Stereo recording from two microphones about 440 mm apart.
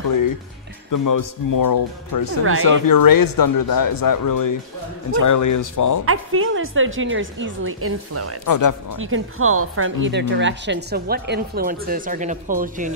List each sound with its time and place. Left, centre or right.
0.9 s speech: left
2.4 s speech: right
2.9 s speech: left
6.0 s speech: right
8.5 s speech: left
8.9 s speech: right